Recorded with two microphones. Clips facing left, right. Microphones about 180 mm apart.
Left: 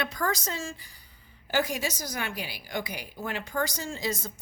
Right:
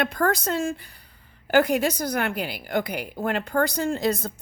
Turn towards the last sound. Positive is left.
turn(degrees=-60)  # may be behind; listen again after turning